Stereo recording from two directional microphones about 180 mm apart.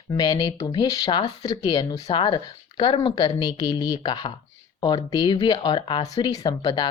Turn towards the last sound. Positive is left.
turn(degrees=25)  # may be behind; listen again after turning